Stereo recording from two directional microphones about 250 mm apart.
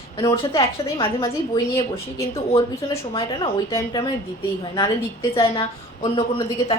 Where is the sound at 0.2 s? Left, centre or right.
Centre.